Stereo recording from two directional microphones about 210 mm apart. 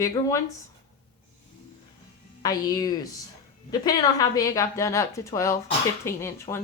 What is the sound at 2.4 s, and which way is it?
Speech, 20° left (ahead or behind).